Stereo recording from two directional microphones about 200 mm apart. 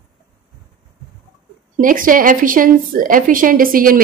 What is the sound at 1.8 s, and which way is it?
Speech, 45° right (ahead or behind).